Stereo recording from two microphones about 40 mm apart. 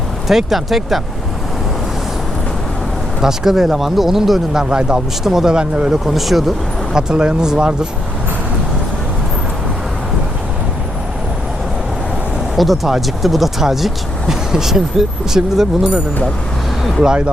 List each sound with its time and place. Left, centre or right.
0.3 s speech: centre
3.2 s speech: centre
4.6 s speech: right
5.2 s speech: centre
5.5 s speech: right
6.1 s speech: centre
6.9 s speech: right
12.5 s speech: centre